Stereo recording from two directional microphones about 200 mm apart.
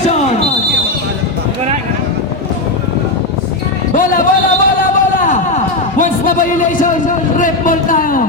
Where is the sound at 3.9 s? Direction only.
40° left (ahead or behind).